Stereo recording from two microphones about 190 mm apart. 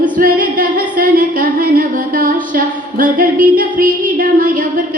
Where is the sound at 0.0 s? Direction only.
45° right (ahead or behind).